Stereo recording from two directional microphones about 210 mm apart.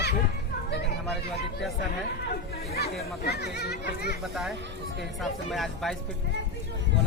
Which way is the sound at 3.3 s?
50° left (ahead or behind).